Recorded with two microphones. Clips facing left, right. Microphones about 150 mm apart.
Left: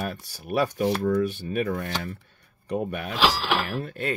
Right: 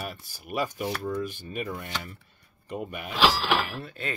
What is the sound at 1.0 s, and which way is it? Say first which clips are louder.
Speech: left 7 dB; 60° left (ahead or behind).